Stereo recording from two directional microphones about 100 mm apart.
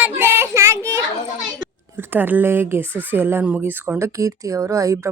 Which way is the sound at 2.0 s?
20° right (ahead or behind).